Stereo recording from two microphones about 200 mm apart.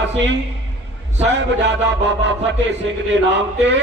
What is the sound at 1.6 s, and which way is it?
Speech, 60° right (ahead or behind).